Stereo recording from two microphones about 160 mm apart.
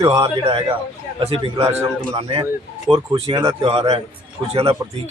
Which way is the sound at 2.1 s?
35° right (ahead or behind).